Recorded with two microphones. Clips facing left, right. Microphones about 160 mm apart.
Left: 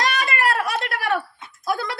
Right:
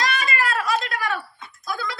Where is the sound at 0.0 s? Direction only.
65° left (ahead or behind).